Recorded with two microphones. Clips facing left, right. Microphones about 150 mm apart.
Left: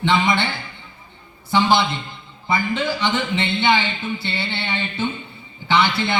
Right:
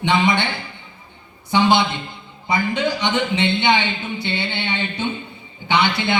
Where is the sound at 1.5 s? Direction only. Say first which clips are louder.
Right 1 dB; 20° right (ahead or behind).